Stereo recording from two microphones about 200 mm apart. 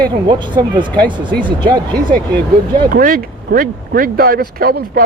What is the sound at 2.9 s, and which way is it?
Speech, 45° right (ahead or behind).